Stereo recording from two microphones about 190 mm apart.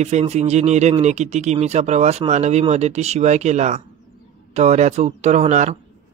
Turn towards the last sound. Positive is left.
turn(degrees=-35)  # may be behind; listen again after turning